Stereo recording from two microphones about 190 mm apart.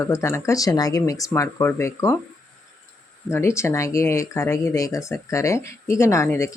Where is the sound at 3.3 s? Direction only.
15° left (ahead or behind).